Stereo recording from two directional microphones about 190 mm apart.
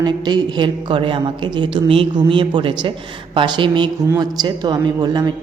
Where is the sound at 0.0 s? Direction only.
25° right (ahead or behind).